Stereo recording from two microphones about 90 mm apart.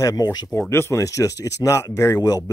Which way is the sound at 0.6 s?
30° left (ahead or behind).